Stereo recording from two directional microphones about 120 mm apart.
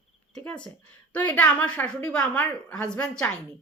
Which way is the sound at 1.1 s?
10° left (ahead or behind).